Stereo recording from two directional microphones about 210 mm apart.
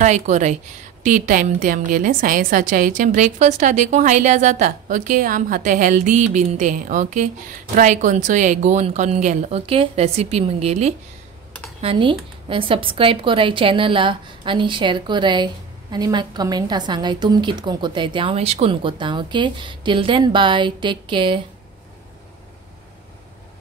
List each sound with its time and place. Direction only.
0.0 s a woman's voice: 35° right (ahead or behind)